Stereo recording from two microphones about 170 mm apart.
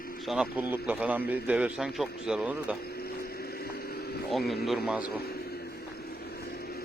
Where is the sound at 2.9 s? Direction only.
65° left (ahead or behind).